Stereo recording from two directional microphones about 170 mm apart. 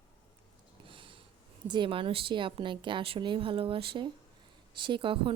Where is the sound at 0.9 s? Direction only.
30° right (ahead or behind).